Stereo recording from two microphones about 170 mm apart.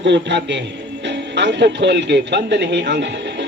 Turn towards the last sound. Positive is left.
turn(degrees=-90)